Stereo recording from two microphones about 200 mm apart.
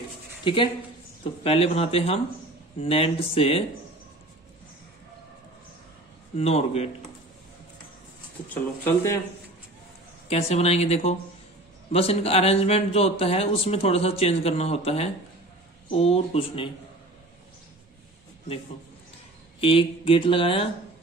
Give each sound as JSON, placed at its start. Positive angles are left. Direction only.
{"t": 0.4, "sound": "speech", "side_deg": 25}
{"t": 6.3, "sound": "speech", "side_deg": 30}
{"t": 8.8, "sound": "speech", "side_deg": 15}
{"t": 10.3, "sound": "speech", "side_deg": 30}
{"t": 19.6, "sound": "speech", "side_deg": 25}